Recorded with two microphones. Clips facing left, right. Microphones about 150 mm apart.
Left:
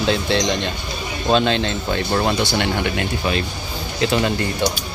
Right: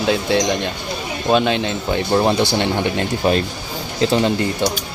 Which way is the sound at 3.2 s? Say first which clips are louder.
Right 5 dB; 40° right (ahead or behind).